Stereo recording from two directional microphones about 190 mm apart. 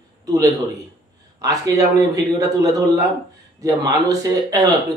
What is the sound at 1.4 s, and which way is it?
Speech, 20° right (ahead or behind).